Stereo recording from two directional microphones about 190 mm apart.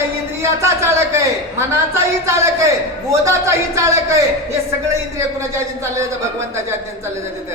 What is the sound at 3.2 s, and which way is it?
Speech, 15° right (ahead or behind).